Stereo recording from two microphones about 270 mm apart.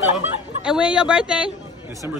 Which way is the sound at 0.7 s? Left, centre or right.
Centre.